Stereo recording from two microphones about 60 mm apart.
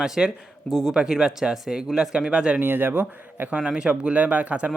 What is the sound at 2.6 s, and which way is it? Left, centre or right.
Speech, right.